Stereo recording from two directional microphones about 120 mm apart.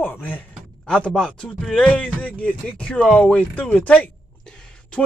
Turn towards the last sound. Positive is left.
turn(degrees=10)  # may be behind; listen again after turning